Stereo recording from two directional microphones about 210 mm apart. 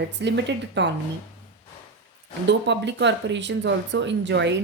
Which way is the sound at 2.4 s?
55° right (ahead or behind).